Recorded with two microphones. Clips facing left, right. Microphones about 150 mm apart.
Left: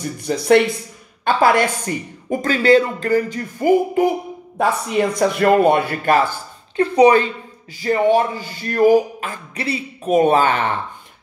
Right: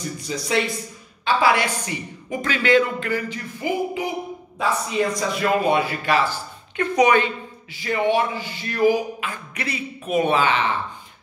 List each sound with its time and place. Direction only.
0.2 s speech: 60° left (ahead or behind)
4.6 s speech: 60° left (ahead or behind)
6.8 s a woman's voice: 35° left (ahead or behind); by 10.8 s 50° left (ahead or behind)